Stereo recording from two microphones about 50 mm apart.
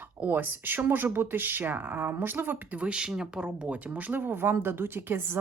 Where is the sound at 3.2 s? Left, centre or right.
Centre.